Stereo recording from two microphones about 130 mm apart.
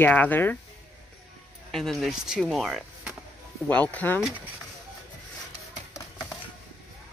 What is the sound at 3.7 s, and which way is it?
Speech, 10° left (ahead or behind).